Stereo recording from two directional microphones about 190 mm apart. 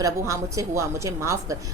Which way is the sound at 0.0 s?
15° right (ahead or behind).